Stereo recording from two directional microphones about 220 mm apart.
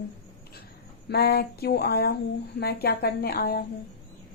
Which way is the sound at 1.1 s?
45° left (ahead or behind).